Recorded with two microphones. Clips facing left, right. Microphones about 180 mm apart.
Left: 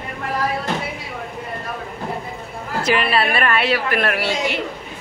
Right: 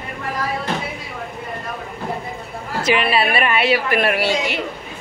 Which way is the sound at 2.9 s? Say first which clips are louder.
Right 1 dB; 5° right (ahead or behind).